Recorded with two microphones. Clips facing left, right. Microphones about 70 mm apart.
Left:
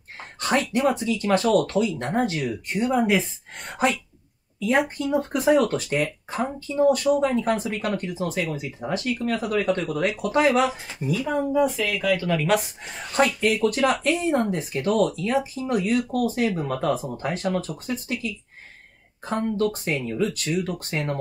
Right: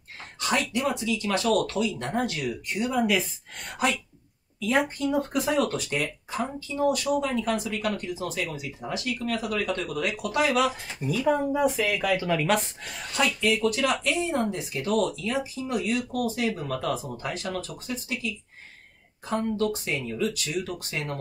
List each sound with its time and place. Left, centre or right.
0.4 s speech: left
5.0 s speech: centre
5.6 s speech: left
11.0 s speech: centre
11.8 s speech: centre
12.4 s speech: centre
13.1 s speech: left
19.5 s speech: left